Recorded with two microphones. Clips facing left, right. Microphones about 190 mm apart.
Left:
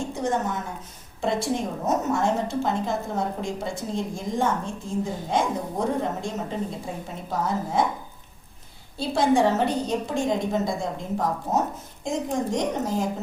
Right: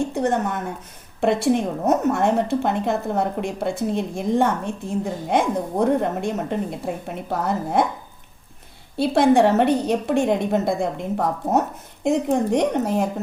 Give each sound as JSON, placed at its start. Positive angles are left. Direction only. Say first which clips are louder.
{"t": 0.1, "sound": "a woman's voice", "louder": "right 4 dB", "side_deg": -60}
{"t": 9.0, "sound": "a woman's voice", "louder": "right 5 dB", "side_deg": -65}